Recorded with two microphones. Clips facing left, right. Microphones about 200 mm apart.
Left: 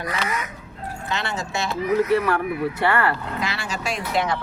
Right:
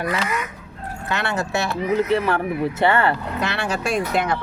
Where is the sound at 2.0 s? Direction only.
25° right (ahead or behind).